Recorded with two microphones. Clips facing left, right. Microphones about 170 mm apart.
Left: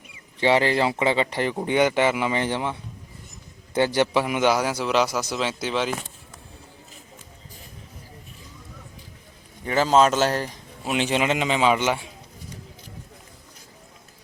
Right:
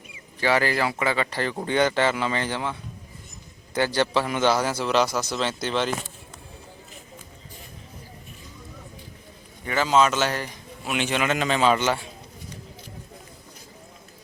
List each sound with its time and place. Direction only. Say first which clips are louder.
0.3 s speech: left 3 dB; 25° left (ahead or behind)
3.8 s a man's voice: left 2 dB; 20° left (ahead or behind)
9.6 s speech: left 2 dB; 35° left (ahead or behind); by 12.0 s 15° left (ahead or behind)